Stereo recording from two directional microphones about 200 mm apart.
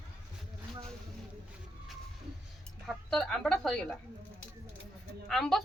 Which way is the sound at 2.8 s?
Centre (ahead or behind).